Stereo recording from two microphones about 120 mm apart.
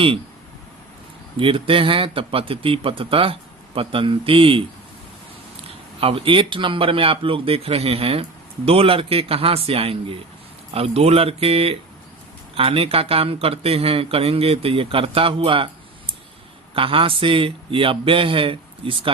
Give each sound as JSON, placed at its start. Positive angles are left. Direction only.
{"t": 1.4, "sound": "speech", "side_deg": -50}
{"t": 5.6, "sound": "speech", "side_deg": -50}